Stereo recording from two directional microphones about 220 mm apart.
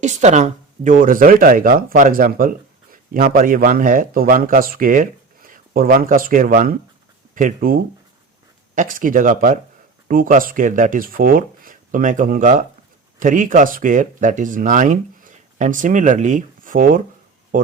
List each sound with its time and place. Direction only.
0.0 s speech: 35° right (ahead or behind)